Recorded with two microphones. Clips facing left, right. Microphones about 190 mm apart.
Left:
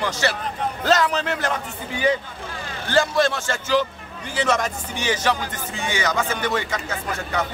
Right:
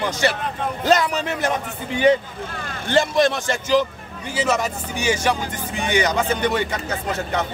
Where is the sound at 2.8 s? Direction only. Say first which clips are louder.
Right 2 dB; 20° right (ahead or behind).